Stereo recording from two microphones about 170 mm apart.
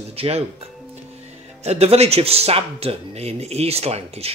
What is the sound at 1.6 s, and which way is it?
Speech, 40° right (ahead or behind).